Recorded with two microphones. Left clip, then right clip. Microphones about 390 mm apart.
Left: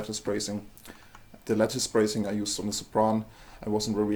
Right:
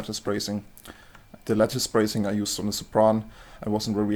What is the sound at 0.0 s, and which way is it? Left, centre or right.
Speech, right.